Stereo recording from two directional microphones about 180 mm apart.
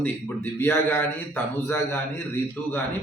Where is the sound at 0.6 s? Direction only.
10° left (ahead or behind).